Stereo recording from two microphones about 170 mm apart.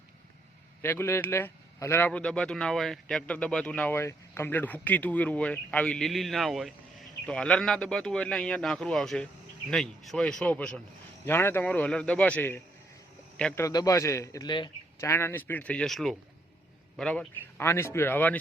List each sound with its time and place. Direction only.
0.8 s a man's voice: 15° left (ahead or behind)
13.7 s a man's voice: 20° left (ahead or behind)
15.1 s speech: 15° left (ahead or behind)